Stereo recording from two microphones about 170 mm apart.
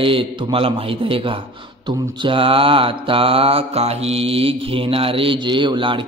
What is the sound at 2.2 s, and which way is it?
Mantra, 30° right (ahead or behind).